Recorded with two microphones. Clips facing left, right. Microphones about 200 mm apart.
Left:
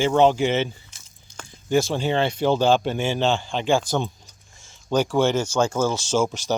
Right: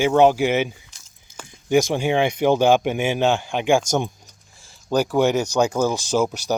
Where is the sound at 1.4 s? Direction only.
15° right (ahead or behind).